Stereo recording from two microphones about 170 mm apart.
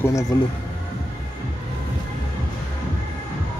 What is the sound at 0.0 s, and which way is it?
Speech, 20° left (ahead or behind).